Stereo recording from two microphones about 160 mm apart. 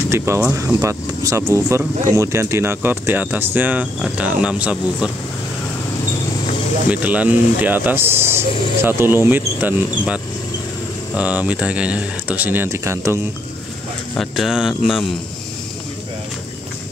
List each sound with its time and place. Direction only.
0.1 s speech: 15° right (ahead or behind)
6.9 s speech: 10° right (ahead or behind)
14.1 s speech: centre (ahead or behind)